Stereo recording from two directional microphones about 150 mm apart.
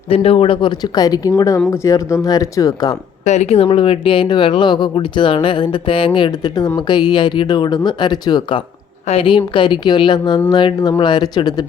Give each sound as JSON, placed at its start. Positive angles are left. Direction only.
{"t": 0.1, "sound": "speech", "side_deg": 40}
{"t": 3.2, "sound": "speech", "side_deg": 45}